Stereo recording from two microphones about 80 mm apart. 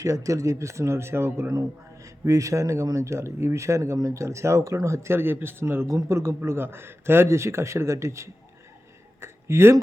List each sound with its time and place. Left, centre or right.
0.0 s speech: right
5.9 s speech: right
9.2 s a sound: right